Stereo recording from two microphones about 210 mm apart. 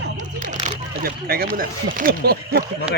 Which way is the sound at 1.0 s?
45° right (ahead or behind).